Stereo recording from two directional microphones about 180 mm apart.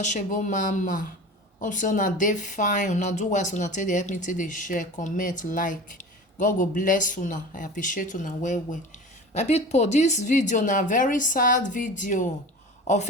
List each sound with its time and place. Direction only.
0.0 s speech: 45° left (ahead or behind)